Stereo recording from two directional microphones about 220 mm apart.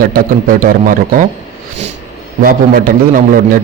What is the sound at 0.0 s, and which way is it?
A man's voice, 40° right (ahead or behind).